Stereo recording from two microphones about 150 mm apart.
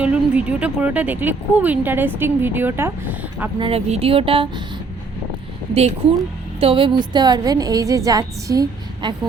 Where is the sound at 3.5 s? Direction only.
40° right (ahead or behind).